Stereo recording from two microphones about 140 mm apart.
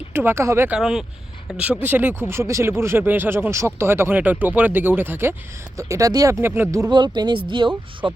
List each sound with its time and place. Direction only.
0.1 s speech: 15° right (ahead or behind)
0.8 s speech: 5° right (ahead or behind); by 7.0 s 20° right (ahead or behind)
7.0 s speech: 30° right (ahead or behind)